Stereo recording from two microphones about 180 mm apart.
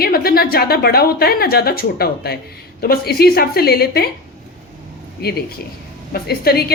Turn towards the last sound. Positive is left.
turn(degrees=60)  # may be behind; listen again after turning